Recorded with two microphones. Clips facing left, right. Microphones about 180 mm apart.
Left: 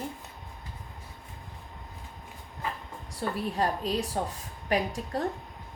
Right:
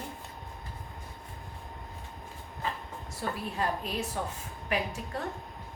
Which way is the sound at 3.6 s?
35° left (ahead or behind).